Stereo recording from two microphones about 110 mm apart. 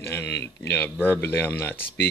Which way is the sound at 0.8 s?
20° left (ahead or behind).